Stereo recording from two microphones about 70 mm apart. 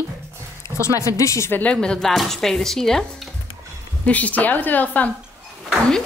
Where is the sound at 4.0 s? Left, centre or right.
Left.